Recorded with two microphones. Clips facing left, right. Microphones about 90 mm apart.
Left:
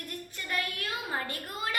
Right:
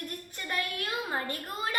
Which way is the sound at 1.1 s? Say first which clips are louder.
Right 1 dB; 35° right (ahead or behind).